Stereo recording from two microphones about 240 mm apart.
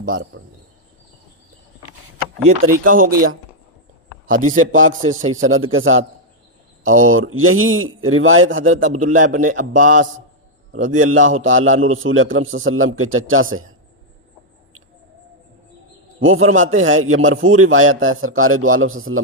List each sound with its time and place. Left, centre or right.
0.0 s speech: right
2.8 s a man's voice: right
4.3 s a man's voice: right
4.7 s a man's voice: right
5.0 s a man's voice: right
5.3 s a man's voice: right
9.0 s a man's voice: right
11.3 s a man's voice: right
16.2 s a man's voice: right